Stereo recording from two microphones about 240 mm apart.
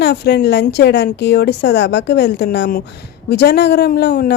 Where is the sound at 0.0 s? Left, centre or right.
Left.